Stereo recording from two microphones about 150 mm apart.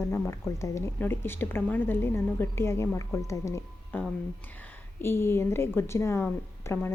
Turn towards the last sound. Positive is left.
turn(degrees=15)  # may be behind; listen again after turning